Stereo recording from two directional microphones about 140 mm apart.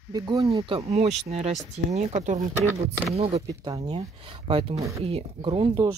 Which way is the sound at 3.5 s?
30° right (ahead or behind).